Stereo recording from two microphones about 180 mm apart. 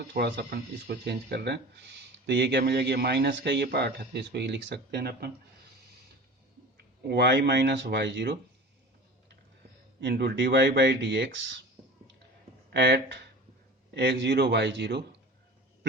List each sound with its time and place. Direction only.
0.0 s speech: 65° right (ahead or behind)
6.7 s speech: 70° right (ahead or behind)
10.0 s speech: 65° right (ahead or behind); by 11.4 s 80° right
12.7 s speech: 70° right (ahead or behind)